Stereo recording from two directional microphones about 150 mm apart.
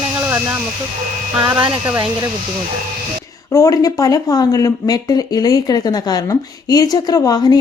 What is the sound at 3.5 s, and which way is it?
Speech, 20° left (ahead or behind).